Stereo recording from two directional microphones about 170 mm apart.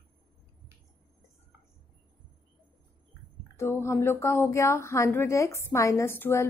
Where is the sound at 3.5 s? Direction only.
15° left (ahead or behind).